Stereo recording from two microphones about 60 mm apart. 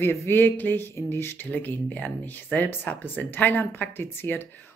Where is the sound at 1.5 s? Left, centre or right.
Left.